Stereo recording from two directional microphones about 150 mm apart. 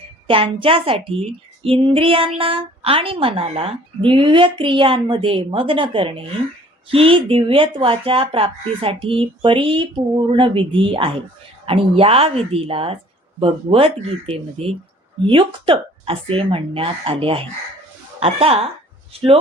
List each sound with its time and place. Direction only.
0.3 s speech: 35° right (ahead or behind)